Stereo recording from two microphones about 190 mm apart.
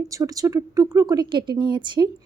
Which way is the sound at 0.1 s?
20° right (ahead or behind).